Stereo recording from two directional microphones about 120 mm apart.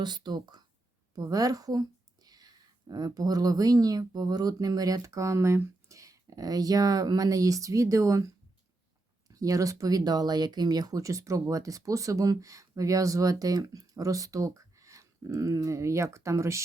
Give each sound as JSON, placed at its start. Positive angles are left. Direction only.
{"t": 0.0, "sound": "a woman's voice", "side_deg": -35}
{"t": 9.3, "sound": "speech", "side_deg": -30}